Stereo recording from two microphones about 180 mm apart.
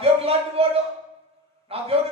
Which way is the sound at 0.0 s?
35° right (ahead or behind).